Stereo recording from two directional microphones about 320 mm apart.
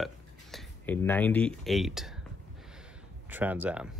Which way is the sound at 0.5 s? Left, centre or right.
Centre.